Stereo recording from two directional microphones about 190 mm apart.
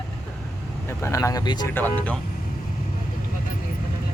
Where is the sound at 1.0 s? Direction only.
15° left (ahead or behind).